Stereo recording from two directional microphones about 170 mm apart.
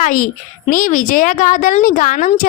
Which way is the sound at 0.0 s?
50° left (ahead or behind).